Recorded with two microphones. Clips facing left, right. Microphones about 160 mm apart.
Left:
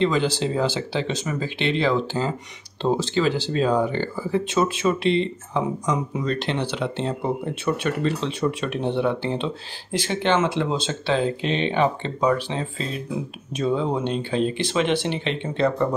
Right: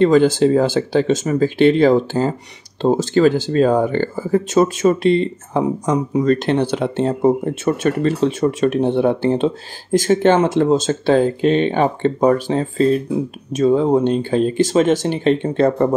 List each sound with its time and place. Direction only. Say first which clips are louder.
0.0 s speech: right 9 dB; 50° right (ahead or behind)